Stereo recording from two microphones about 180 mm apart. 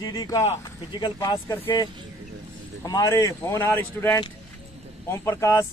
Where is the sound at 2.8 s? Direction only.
20° left (ahead or behind).